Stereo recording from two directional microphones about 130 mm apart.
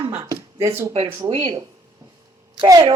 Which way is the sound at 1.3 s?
40° right (ahead or behind).